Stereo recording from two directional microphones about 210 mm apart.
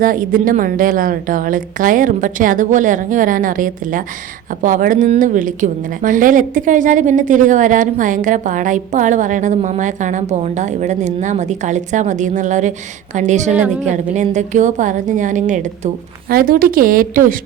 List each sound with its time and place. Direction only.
0.0 s a woman's voice: 40° right (ahead or behind)